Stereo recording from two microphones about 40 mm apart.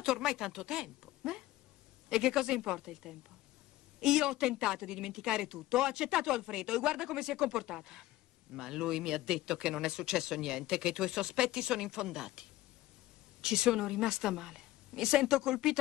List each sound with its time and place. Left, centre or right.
0.0 s speech: centre